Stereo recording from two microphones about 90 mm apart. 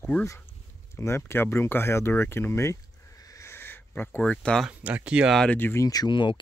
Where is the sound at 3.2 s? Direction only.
35° left (ahead or behind).